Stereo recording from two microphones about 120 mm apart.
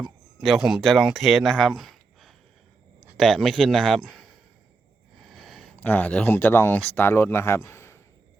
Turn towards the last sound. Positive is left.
turn(degrees=20)  # may be behind; listen again after turning